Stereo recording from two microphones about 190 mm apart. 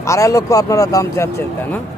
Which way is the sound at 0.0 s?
15° left (ahead or behind).